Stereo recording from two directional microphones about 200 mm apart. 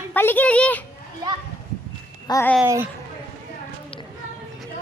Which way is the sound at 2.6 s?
15° right (ahead or behind).